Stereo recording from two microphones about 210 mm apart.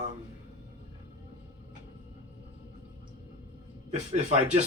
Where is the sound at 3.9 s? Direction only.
30° right (ahead or behind).